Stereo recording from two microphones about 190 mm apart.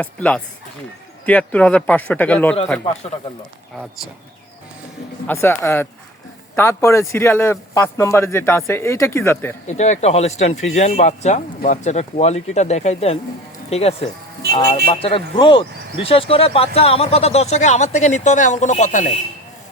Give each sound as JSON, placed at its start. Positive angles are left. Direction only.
{"t": 0.0, "sound": "speech", "side_deg": 5}
{"t": 5.2, "sound": "speech", "side_deg": 10}
{"t": 9.6, "sound": "speech", "side_deg": 40}